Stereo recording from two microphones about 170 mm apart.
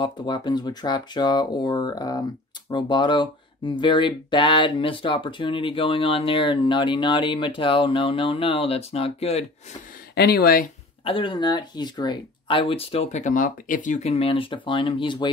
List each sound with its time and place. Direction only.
0.0 s speech: 25° left (ahead or behind)
10.1 s speech: 70° left (ahead or behind)
11.1 s speech: 30° left (ahead or behind)